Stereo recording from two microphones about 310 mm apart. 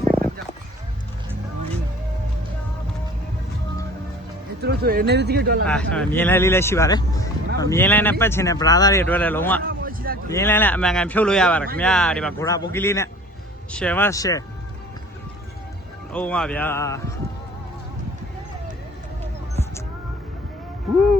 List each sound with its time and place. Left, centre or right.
4.6 s speech: right
5.6 s speech: centre
9.6 s a sound: right
10.2 s speech: centre
16.1 s speech: centre